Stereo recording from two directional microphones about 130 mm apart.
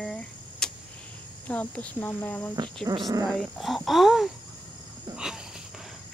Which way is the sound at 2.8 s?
30° right (ahead or behind).